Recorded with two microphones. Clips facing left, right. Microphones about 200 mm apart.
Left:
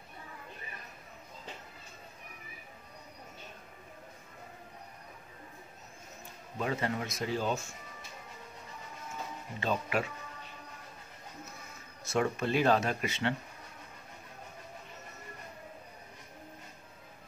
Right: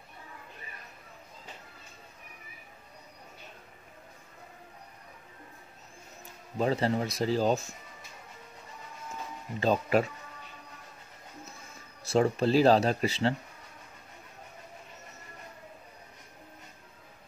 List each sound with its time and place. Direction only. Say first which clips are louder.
6.6 s speech: right 6 dB; 35° right (ahead or behind)
9.6 s speech: right 7 dB; 35° right (ahead or behind)
12.0 s speech: right 5 dB; 30° right (ahead or behind)